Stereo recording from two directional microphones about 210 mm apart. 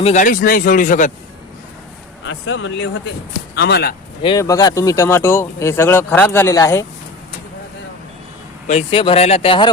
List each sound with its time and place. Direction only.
0.0 s speech: 35° left (ahead or behind)
2.2 s speech: 65° left (ahead or behind)
3.5 s speech: 50° left (ahead or behind)
4.2 s speech: 20° left (ahead or behind)
8.6 s speech: 30° left (ahead or behind)